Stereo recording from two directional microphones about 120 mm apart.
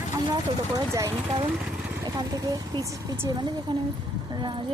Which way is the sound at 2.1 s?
30° right (ahead or behind).